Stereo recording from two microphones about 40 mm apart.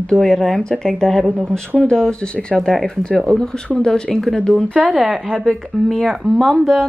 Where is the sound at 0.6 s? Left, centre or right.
Centre.